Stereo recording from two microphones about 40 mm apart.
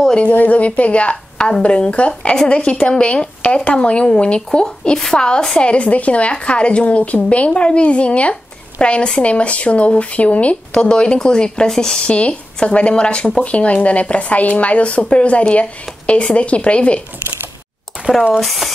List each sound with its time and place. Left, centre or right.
0.3 s a woman's voice: left; by 5.2 s centre
5.6 s a woman's voice: left
10.7 s speech: left
12.1 s a woman's voice: left
18.1 s speech: centre
18.4 s speech: centre